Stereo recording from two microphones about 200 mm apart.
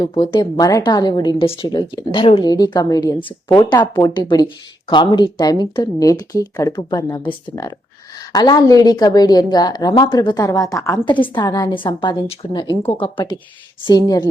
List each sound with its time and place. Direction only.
0.0 s a woman's voice: 25° left (ahead or behind)